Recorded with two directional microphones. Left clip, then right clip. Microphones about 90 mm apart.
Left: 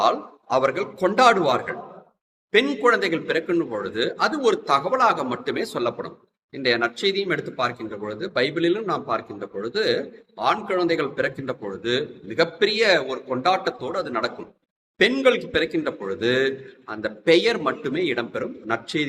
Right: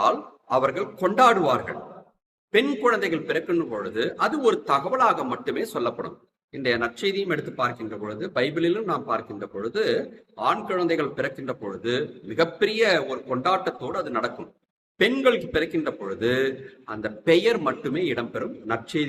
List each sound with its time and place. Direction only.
0.0 s speech: 25° left (ahead or behind)